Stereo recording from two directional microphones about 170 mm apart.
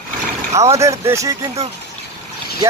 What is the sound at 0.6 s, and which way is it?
Speech, 20° right (ahead or behind).